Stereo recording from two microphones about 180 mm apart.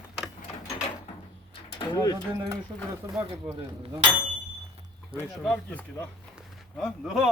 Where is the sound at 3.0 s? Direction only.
15° right (ahead or behind).